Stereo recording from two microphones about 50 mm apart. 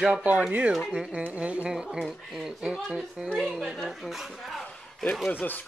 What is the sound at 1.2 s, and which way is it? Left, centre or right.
Speech, right.